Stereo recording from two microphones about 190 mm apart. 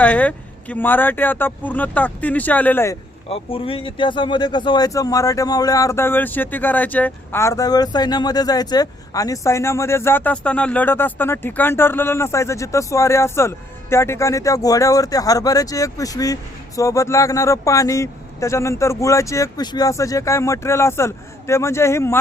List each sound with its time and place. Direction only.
0.0 s speech: 10° left (ahead or behind)
3.2 s speech: 30° left (ahead or behind)